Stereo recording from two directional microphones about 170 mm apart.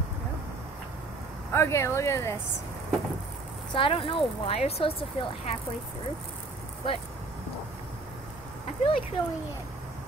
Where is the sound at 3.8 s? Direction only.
30° left (ahead or behind).